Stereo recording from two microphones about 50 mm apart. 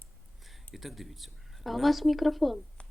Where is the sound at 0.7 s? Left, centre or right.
Centre.